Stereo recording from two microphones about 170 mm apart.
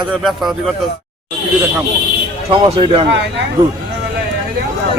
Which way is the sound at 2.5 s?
30° right (ahead or behind).